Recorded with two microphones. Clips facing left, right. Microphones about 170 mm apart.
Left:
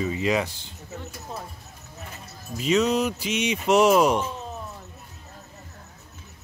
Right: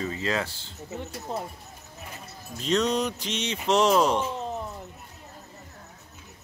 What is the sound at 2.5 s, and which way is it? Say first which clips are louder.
Speech: left 3 dB; 5° left (ahead or behind).